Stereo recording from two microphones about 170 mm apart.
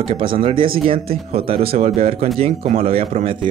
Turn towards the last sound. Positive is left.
turn(degrees=-35)  # may be behind; listen again after turning